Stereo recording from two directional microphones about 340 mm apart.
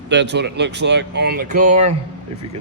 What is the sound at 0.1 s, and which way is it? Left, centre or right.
Speech, right.